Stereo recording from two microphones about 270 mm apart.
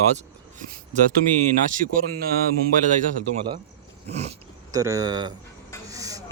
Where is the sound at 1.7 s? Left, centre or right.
Right.